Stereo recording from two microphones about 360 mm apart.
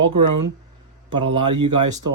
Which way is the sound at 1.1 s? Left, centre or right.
Centre.